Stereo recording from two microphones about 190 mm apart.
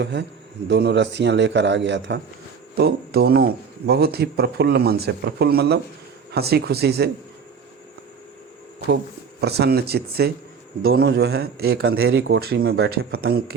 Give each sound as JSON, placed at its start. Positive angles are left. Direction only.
{"t": 0.0, "sound": "a man's voice", "side_deg": -65}
{"t": 2.7, "sound": "speech", "side_deg": -55}
{"t": 9.4, "sound": "speech", "side_deg": -60}
{"t": 12.0, "sound": "a man's voice", "side_deg": -70}
{"t": 12.5, "sound": "speech", "side_deg": -90}
{"t": 12.9, "sound": "speech", "side_deg": -55}